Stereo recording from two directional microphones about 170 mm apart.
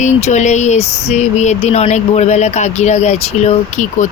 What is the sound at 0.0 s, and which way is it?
Speech, 45° left (ahead or behind).